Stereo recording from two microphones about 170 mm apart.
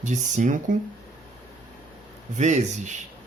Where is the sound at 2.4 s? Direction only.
45° right (ahead or behind).